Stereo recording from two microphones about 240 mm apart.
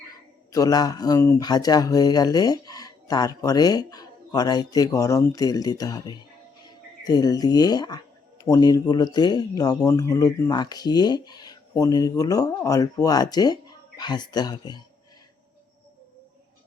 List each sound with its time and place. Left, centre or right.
0.5 s speech: centre